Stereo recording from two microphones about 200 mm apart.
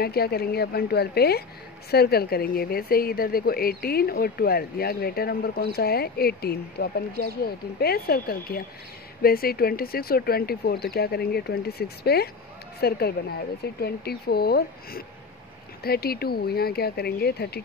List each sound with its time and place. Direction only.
0.0 s a woman's voice: 50° left (ahead or behind)